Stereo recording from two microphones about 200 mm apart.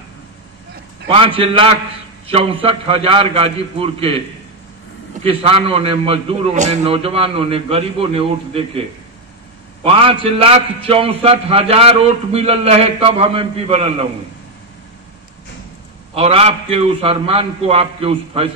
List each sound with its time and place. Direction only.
1.0 s a man's voice: 25° right (ahead or behind)
5.2 s a man's voice: 30° right (ahead or behind)
9.8 s a man's voice: 25° right (ahead or behind)
16.2 s a man's voice: 30° right (ahead or behind)